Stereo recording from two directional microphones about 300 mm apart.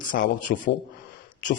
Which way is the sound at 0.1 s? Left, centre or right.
Left.